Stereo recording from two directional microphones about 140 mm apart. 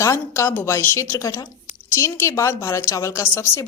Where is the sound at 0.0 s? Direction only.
20° left (ahead or behind).